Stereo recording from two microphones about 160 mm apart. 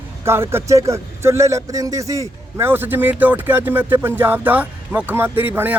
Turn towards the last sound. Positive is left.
turn(degrees=-10)  # may be behind; listen again after turning